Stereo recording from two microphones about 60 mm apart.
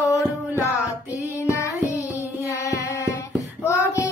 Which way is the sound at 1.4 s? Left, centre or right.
Left.